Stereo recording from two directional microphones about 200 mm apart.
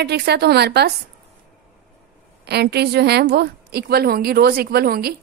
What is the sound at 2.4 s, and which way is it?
A woman's voice, 55° right (ahead or behind).